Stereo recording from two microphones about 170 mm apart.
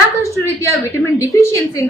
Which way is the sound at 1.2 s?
15° left (ahead or behind).